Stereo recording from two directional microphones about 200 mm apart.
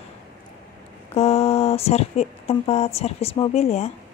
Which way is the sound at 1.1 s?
30° left (ahead or behind).